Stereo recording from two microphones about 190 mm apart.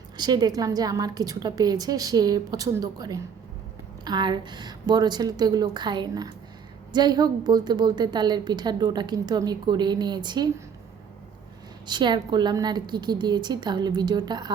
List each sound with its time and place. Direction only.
0.2 s a woman's voice: 20° right (ahead or behind)
11.9 s a woman's voice: 25° right (ahead or behind)